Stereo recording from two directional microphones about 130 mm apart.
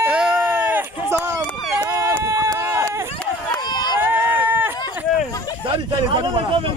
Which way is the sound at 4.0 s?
15° right (ahead or behind).